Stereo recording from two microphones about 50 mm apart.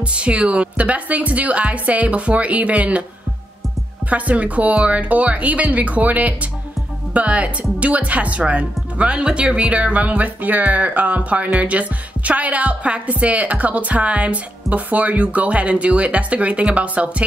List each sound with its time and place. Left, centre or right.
0.0 s speech: right
4.1 s speech: right